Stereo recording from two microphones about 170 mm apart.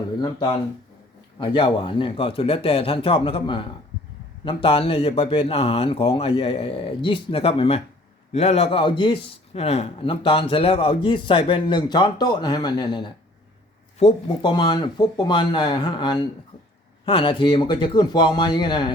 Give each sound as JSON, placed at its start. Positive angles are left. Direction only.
{"t": 0.2, "sound": "a man's voice", "side_deg": 25}